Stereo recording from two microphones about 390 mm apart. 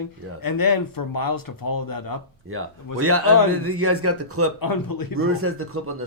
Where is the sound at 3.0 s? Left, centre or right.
Right.